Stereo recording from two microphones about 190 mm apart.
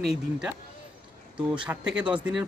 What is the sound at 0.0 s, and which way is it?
Speech, centre (ahead or behind).